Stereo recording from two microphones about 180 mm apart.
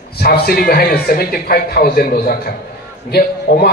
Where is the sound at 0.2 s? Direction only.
60° left (ahead or behind).